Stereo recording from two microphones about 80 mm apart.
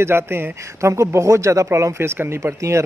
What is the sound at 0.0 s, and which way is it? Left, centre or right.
Speech, right.